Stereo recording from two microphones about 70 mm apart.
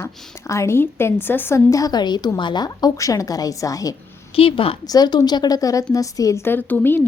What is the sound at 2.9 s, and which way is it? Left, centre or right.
Speech, left.